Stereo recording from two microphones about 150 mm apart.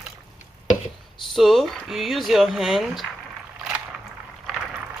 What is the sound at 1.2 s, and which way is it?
Speech, centre (ahead or behind).